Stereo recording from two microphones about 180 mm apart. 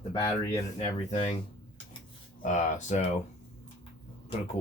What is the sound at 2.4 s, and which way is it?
Speech, 40° left (ahead or behind).